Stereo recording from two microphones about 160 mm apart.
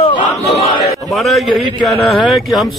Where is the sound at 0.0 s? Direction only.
40° left (ahead or behind).